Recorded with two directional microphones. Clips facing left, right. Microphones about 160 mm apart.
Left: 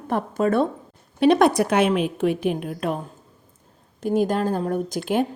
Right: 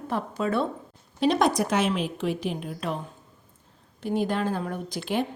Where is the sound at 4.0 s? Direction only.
45° left (ahead or behind).